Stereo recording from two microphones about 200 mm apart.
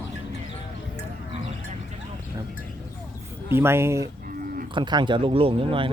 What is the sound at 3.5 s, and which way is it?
Speech, 10° right (ahead or behind).